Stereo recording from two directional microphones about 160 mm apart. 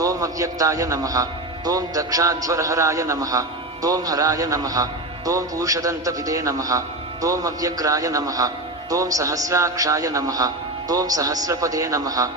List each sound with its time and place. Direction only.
0.0 s a man's voice: 20° right (ahead or behind)